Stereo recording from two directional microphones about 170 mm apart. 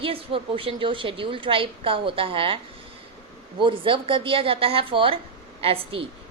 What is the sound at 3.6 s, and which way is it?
A woman's voice, 30° right (ahead or behind).